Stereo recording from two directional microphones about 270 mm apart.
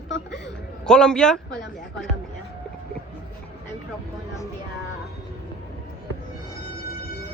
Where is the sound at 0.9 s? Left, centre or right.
Centre.